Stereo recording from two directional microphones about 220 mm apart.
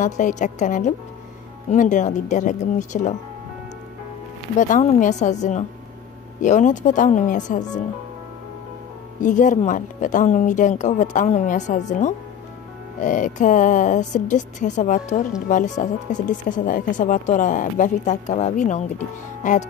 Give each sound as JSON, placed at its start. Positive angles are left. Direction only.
{"t": 0.0, "sound": "speech", "side_deg": 35}
{"t": 4.6, "sound": "speech", "side_deg": 35}
{"t": 9.2, "sound": "speech", "side_deg": 35}